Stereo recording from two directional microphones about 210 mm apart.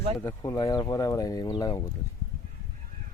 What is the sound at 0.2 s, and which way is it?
Speech, 15° left (ahead or behind).